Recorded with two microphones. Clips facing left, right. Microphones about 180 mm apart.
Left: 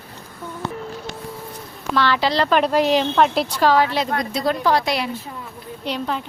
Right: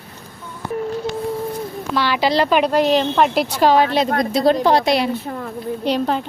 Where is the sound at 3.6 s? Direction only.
20° right (ahead or behind).